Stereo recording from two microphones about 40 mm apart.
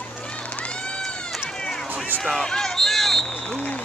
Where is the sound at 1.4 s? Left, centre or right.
Centre.